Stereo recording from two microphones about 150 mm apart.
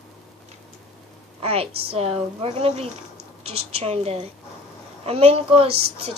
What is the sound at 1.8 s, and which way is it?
A woman's voice, 40° right (ahead or behind).